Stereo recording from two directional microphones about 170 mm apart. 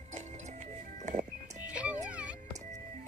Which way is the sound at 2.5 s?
45° right (ahead or behind).